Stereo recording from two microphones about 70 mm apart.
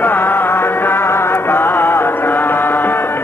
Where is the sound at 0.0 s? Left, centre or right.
Left.